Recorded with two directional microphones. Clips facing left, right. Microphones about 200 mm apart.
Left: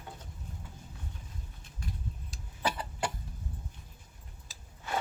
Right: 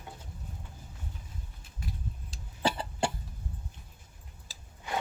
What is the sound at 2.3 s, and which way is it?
Cough, 30° right (ahead or behind).